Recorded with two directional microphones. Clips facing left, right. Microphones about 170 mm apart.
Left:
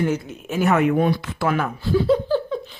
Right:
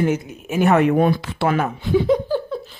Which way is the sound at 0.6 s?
35° right (ahead or behind).